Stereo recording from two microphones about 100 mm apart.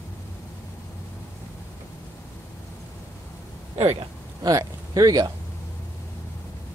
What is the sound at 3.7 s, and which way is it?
Speech, 90° right.